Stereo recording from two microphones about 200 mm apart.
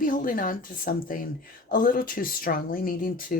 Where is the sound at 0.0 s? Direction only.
45° left (ahead or behind).